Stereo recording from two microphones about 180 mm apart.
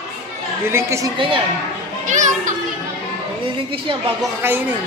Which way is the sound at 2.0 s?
45° right (ahead or behind).